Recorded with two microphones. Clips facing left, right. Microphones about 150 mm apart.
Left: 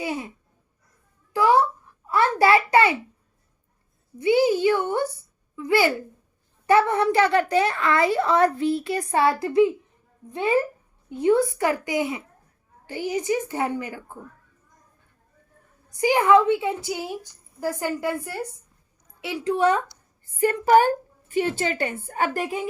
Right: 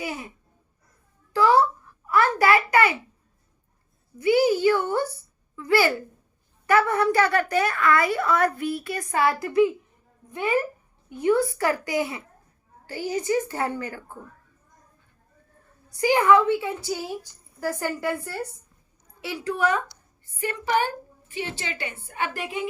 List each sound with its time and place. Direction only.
0.0 s a woman's voice: 25° left (ahead or behind)
1.3 s a child's voice: 20° left (ahead or behind)
4.2 s a woman's voice: 25° left (ahead or behind)
15.9 s a woman's voice: 20° left (ahead or behind)
20.4 s a woman's voice: 45° left (ahead or behind)